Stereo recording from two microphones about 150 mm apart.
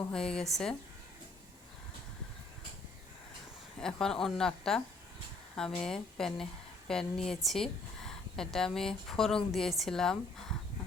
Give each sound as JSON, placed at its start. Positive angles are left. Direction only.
{"t": 0.1, "sound": "a woman's voice", "side_deg": 5}
{"t": 3.8, "sound": "a woman's voice", "side_deg": 5}